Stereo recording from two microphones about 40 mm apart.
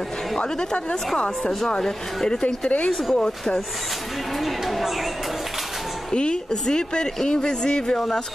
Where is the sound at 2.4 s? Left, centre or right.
Left.